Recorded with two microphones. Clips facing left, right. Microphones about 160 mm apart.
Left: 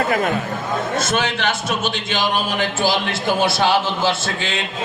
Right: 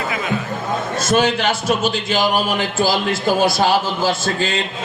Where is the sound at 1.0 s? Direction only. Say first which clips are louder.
Right 4 dB; 35° right (ahead or behind).